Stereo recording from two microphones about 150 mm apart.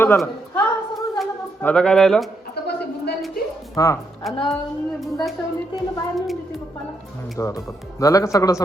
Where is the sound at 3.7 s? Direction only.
20° left (ahead or behind).